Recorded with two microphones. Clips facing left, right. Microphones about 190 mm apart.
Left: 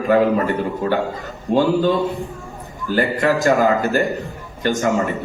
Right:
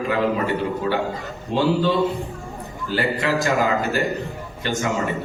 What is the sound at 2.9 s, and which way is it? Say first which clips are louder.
A man's voice: left 4 dB; 50° left (ahead or behind).